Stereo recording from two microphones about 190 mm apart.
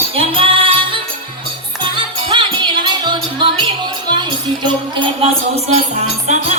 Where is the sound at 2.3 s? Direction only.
25° right (ahead or behind).